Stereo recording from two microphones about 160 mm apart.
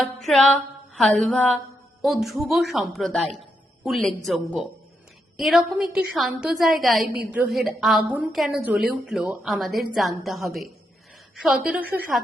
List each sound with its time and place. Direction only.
0.0 s music: centre (ahead or behind)
2.0 s a woman's voice: centre (ahead or behind)